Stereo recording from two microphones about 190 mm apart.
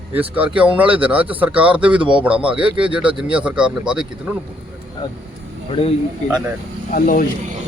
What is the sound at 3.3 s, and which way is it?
Speech, 5° right (ahead or behind).